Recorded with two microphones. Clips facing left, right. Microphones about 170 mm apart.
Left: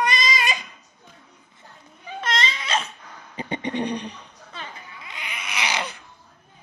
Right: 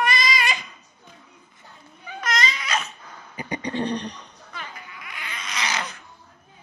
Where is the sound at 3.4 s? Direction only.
25° left (ahead or behind); by 4.2 s 10° left (ahead or behind).